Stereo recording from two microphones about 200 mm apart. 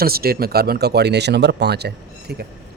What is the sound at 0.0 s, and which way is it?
A man's voice, 50° right (ahead or behind).